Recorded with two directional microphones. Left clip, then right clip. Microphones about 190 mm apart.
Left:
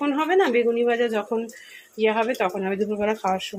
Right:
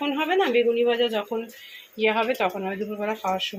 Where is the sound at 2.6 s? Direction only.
15° left (ahead or behind).